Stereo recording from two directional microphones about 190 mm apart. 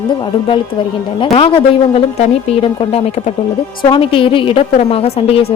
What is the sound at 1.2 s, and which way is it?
A woman's voice, 30° left (ahead or behind).